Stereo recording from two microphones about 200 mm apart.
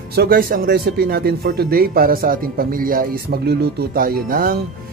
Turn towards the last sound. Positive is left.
turn(degrees=-45)  # may be behind; listen again after turning